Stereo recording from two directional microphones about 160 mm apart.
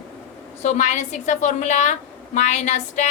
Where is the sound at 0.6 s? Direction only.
45° left (ahead or behind).